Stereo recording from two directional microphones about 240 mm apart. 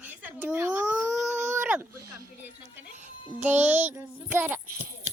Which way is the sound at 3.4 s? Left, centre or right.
Centre.